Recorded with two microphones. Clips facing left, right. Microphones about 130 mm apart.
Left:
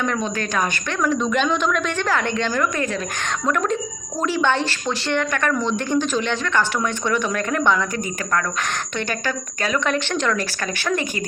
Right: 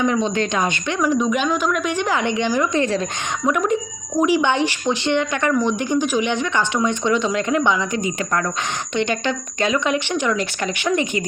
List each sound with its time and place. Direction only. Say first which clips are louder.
0.0 s speech: right 4 dB; 20° right (ahead or behind)
0.9 s speech: right 1 dB; 10° right (ahead or behind)